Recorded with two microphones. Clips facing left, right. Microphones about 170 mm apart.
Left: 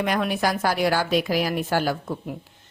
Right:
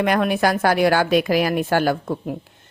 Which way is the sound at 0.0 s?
60° right (ahead or behind).